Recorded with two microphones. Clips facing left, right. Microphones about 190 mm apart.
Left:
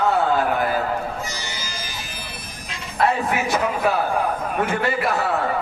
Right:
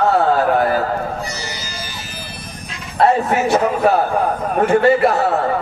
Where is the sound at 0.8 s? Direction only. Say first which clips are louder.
Right 4 dB; 35° right (ahead or behind).